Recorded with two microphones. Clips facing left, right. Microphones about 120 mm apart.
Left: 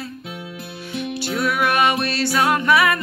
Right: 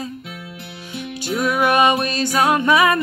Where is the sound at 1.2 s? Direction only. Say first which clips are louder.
Right 3 dB; 15° right (ahead or behind).